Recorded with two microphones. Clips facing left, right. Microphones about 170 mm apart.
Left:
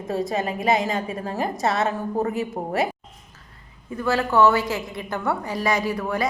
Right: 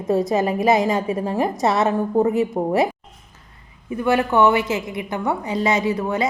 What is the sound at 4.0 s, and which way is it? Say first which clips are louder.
A woman's voice: right 2 dB; 20° right (ahead or behind).